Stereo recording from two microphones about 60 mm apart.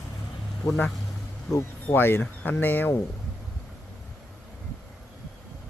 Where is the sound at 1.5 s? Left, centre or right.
Left.